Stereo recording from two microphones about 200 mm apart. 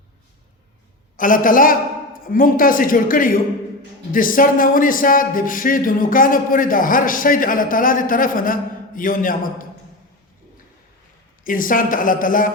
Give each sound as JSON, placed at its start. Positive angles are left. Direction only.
{"t": 1.1, "sound": "a man's voice", "side_deg": 40}
{"t": 11.4, "sound": "speech", "side_deg": 45}